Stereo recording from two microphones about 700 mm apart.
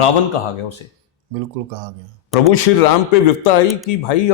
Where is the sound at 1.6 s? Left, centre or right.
Right.